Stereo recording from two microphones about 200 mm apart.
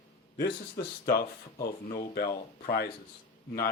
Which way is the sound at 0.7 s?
50° left (ahead or behind).